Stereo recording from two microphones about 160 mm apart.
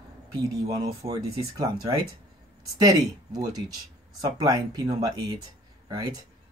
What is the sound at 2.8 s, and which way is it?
Speech, 25° right (ahead or behind).